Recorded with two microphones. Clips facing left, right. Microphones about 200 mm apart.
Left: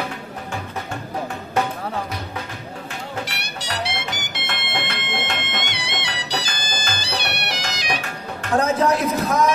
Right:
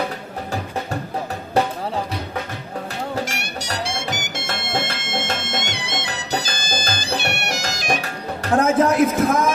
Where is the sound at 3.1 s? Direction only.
45° right (ahead or behind).